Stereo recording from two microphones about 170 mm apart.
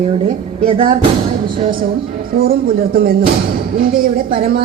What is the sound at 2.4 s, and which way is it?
A woman's voice, 60° right (ahead or behind).